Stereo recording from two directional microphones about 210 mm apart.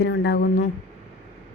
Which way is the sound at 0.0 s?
50° left (ahead or behind).